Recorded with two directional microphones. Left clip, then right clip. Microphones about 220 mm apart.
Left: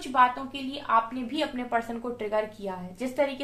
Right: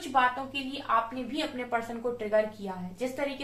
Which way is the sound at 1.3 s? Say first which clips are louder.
Left 3 dB; 45° left (ahead or behind).